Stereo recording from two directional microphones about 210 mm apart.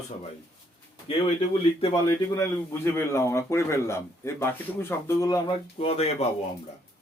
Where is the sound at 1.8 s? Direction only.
20° left (ahead or behind).